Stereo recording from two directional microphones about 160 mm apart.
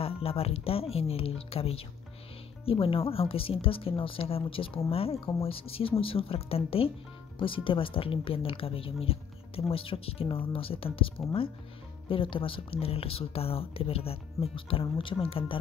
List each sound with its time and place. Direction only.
0.0 s speech: 35° left (ahead or behind)